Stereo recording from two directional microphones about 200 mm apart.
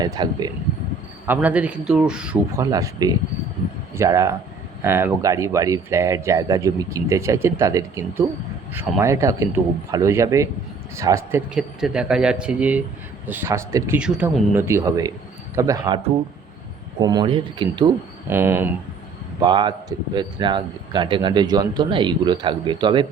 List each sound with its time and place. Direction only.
0.0 s speech: 20° right (ahead or behind)
1.3 s a man's voice: 10° right (ahead or behind)
2.6 s a man's voice: 15° right (ahead or behind)
17.0 s speech: 20° right (ahead or behind)
18.3 s speech: 10° right (ahead or behind)
19.4 s speech: 20° right (ahead or behind)